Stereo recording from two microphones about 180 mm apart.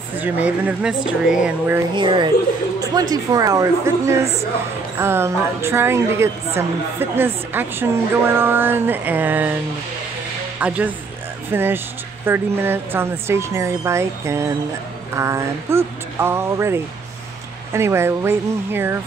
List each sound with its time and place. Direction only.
0.2 s a woman's voice: 10° right (ahead or behind)
2.0 s a woman's voice: 25° right (ahead or behind); by 9.6 s 10° right (ahead or behind)
10.6 s a woman's voice: 10° right (ahead or behind)